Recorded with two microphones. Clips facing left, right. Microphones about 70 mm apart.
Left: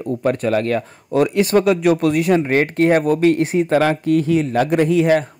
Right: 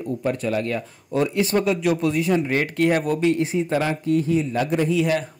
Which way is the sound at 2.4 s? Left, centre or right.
Left.